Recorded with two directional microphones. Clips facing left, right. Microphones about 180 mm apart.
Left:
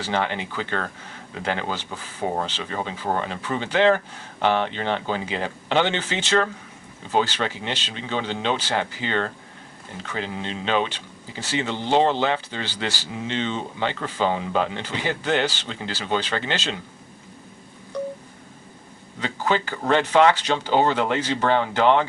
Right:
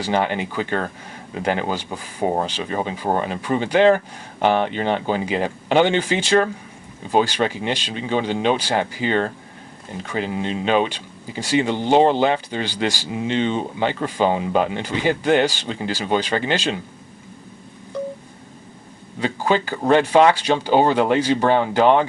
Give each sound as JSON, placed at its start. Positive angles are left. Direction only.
{"t": 0.0, "sound": "speech", "side_deg": -15}
{"t": 19.2, "sound": "speech", "side_deg": -10}